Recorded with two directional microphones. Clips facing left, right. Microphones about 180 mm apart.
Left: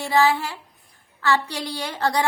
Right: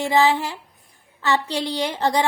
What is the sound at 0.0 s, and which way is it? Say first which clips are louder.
A woman's voice: right 1 dB; 20° right (ahead or behind).